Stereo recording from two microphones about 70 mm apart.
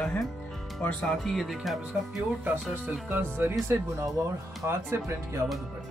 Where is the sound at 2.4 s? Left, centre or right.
Right.